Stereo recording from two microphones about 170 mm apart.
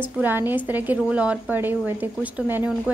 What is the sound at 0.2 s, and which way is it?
A woman's voice, 10° right (ahead or behind).